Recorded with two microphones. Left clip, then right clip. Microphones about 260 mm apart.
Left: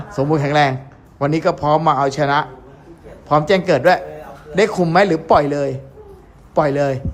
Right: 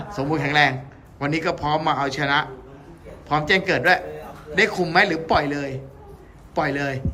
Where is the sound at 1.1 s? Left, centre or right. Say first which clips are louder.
Left 6 dB; left.